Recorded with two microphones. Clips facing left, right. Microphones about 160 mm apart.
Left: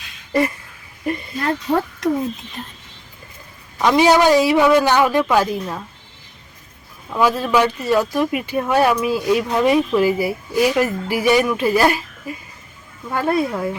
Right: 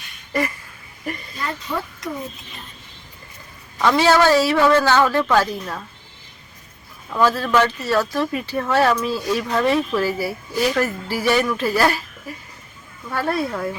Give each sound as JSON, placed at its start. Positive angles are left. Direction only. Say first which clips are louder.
{"t": 1.4, "sound": "speech", "louder": "left 8 dB", "side_deg": 60}
{"t": 3.8, "sound": "speech", "louder": "left 2 dB", "side_deg": 15}
{"t": 7.1, "sound": "speech", "louder": "left 1 dB", "side_deg": 10}
{"t": 13.1, "sound": "speech", "louder": "left 3 dB", "side_deg": 20}